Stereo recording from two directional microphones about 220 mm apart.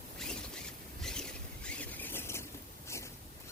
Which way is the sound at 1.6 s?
5° left (ahead or behind).